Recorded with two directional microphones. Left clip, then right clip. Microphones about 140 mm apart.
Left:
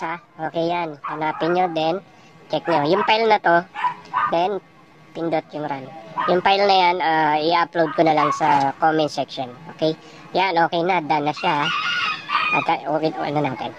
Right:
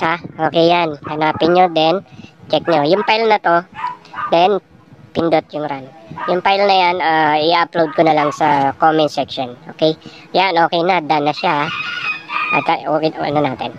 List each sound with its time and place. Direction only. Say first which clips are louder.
0.0 s a man's voice: right 10 dB; 40° right (ahead or behind); by 3.6 s 20° right (ahead or behind)
4.3 s a man's voice: right 8 dB; 35° right (ahead or behind)